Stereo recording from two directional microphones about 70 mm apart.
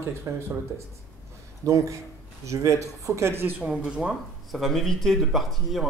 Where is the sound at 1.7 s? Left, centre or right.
Right.